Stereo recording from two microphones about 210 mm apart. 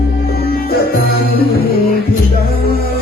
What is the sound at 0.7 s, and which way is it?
Music, 45° left (ahead or behind).